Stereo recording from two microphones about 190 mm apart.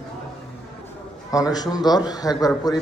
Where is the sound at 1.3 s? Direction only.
20° left (ahead or behind).